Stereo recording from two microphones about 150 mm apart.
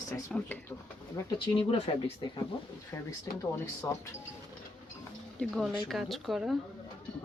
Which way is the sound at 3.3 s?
20° left (ahead or behind).